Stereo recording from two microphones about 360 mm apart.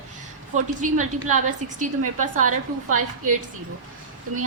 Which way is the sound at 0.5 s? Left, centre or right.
Right.